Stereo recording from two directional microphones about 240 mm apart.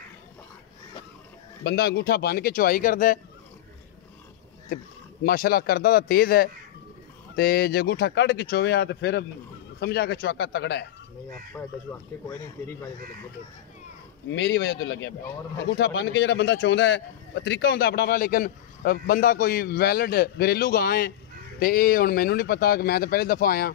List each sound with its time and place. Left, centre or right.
1.6 s speech: left
5.2 s speech: left
11.6 s speech: centre
14.3 s speech: left